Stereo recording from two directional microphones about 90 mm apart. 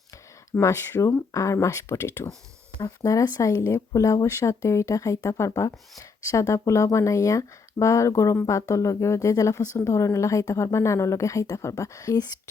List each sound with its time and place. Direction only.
0.6 s speech: 30° left (ahead or behind)
2.7 s speech: 45° left (ahead or behind)